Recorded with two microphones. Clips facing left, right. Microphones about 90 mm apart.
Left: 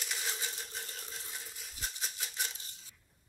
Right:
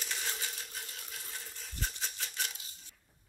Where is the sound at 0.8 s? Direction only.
35° left (ahead or behind).